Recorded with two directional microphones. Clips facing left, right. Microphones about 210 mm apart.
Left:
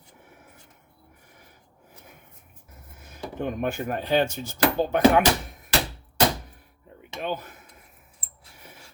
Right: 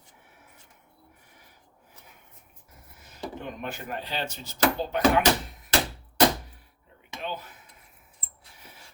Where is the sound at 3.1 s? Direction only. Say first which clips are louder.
Left 6 dB; 50° left (ahead or behind).